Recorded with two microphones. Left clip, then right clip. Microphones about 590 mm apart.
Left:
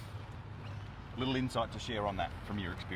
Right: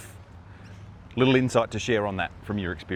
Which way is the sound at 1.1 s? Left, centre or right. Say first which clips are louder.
Right 13 dB; right.